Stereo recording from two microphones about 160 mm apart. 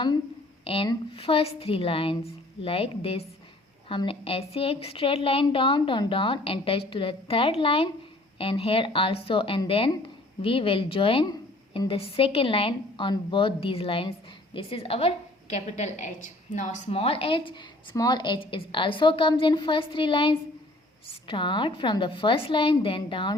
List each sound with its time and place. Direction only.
0.6 s a woman's voice: 35° left (ahead or behind)
16.9 s a woman's voice: 35° left (ahead or behind)